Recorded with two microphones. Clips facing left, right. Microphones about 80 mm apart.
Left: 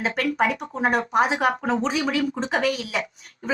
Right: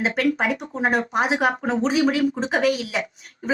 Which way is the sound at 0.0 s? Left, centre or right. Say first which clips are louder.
Right 1 dB; centre.